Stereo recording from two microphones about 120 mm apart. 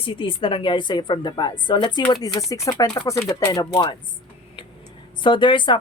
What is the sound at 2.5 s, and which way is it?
Speech, 30° left (ahead or behind).